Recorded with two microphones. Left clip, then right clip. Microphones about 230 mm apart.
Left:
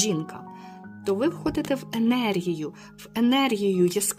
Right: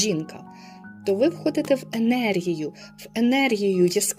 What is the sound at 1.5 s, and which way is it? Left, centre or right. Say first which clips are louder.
Speech: right 5 dB; centre.